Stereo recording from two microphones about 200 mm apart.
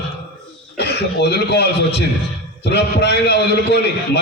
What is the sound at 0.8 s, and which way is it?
Speech, 55° left (ahead or behind).